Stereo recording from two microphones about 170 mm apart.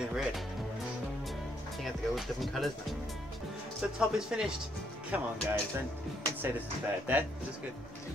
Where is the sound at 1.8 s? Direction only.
Centre (ahead or behind).